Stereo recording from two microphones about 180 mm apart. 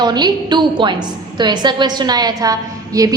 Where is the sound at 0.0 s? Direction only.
25° right (ahead or behind).